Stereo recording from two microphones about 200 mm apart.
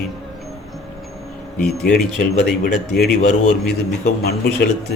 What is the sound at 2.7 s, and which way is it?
A man's voice, 55° left (ahead or behind).